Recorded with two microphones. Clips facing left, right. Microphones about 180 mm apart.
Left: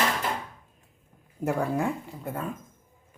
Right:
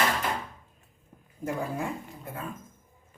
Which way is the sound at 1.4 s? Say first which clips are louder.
Left 5 dB; 70° left (ahead or behind).